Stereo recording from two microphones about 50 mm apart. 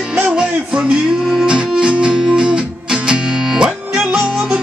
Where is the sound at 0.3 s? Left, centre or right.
Centre.